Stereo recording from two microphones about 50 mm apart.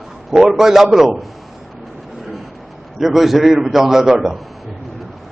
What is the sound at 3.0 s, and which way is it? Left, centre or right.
A man's voice, centre.